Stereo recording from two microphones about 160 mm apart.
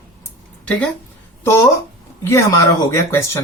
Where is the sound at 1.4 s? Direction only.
15° left (ahead or behind).